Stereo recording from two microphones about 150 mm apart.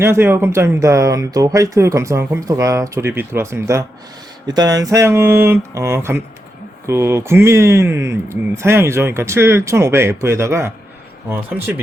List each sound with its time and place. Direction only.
0.0 s speech: 15° right (ahead or behind)